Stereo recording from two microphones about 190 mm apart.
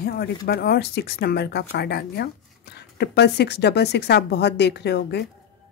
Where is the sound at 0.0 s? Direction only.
55° left (ahead or behind).